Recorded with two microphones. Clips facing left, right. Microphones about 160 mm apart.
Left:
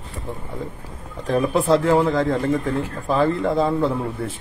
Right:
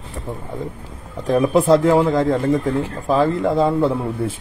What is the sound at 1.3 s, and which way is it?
Speech, 10° right (ahead or behind).